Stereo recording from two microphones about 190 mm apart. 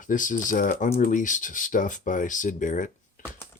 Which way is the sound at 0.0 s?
45° left (ahead or behind).